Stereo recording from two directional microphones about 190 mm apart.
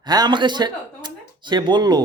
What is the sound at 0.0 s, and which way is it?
A man's voice, 20° right (ahead or behind).